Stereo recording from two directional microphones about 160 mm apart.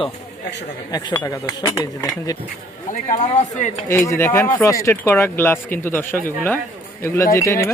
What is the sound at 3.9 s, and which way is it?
Speech, 15° left (ahead or behind).